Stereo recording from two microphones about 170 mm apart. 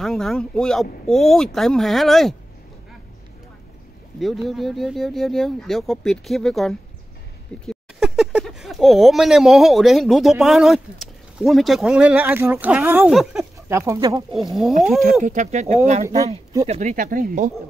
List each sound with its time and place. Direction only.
0.0 s speech: centre (ahead or behind)
4.2 s speech: centre (ahead or behind)
13.7 s speech: 15° right (ahead or behind)
14.3 s speech: centre (ahead or behind)
15.2 s speech: 45° right (ahead or behind)
16.9 s speech: 55° right (ahead or behind)